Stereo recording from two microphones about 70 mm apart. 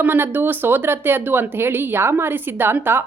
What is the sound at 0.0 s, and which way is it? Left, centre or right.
A woman's voice, right.